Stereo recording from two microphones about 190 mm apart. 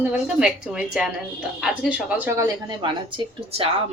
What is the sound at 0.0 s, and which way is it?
A woman's voice, 5° right (ahead or behind).